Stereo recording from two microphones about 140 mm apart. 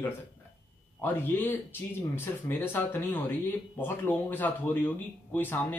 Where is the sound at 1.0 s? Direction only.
15° left (ahead or behind).